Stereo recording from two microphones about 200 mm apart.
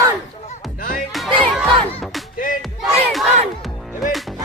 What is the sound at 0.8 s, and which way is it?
Music, 45° left (ahead or behind).